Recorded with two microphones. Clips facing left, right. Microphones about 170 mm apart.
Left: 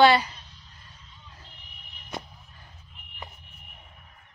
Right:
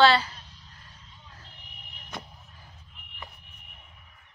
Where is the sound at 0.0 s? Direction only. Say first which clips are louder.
Left 2 dB; 15° left (ahead or behind).